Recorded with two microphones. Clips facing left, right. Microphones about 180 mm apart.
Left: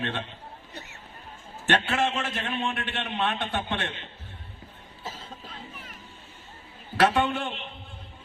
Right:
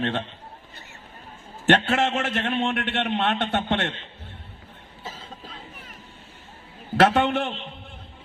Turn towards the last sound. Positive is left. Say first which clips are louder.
# right 4 dB
turn(degrees=-55)  # may be behind; listen again after turning